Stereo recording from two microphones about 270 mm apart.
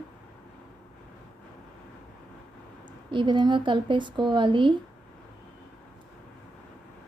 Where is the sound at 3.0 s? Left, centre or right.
Centre.